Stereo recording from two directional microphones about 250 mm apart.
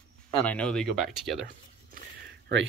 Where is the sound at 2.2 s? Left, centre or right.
Right.